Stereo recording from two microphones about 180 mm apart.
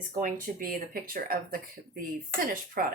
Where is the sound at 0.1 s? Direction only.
50° right (ahead or behind).